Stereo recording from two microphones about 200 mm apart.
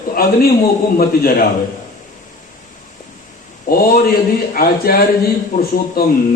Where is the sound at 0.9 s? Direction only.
45° left (ahead or behind).